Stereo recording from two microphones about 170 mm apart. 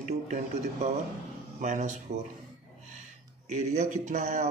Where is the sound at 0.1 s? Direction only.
40° right (ahead or behind).